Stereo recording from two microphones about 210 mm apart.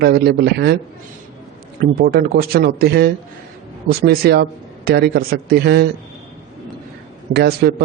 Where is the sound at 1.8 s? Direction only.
45° right (ahead or behind).